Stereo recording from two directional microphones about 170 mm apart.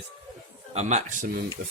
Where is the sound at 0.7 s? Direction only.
45° right (ahead or behind).